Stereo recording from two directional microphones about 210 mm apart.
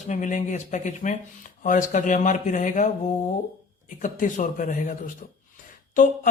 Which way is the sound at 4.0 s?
40° left (ahead or behind).